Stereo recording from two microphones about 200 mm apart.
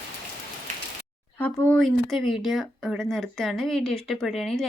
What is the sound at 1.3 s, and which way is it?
Speech, 5° left (ahead or behind).